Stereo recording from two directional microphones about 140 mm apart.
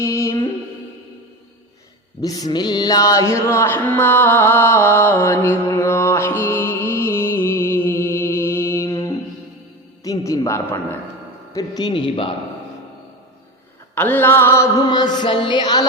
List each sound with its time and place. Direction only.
0.0 s music: 20° left (ahead or behind)
2.2 s mantra: 25° left (ahead or behind)
10.0 s music: 25° left (ahead or behind)
13.9 s a sound: 15° left (ahead or behind)
14.8 s music: 30° left (ahead or behind)